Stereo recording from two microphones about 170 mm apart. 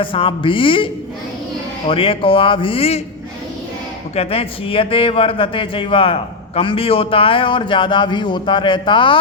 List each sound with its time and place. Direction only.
0.0 s speech: 30° left (ahead or behind)
1.9 s speech: 35° left (ahead or behind)
4.1 s speech: 35° left (ahead or behind)